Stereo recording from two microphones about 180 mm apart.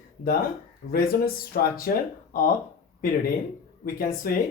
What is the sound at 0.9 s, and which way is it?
Speech, 55° left (ahead or behind).